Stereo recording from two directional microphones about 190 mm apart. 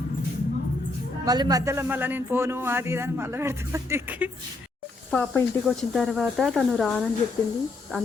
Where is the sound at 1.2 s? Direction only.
20° right (ahead or behind).